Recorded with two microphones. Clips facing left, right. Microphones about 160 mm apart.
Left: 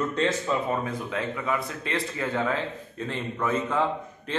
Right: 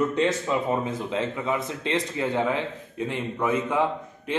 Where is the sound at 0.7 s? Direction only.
25° right (ahead or behind).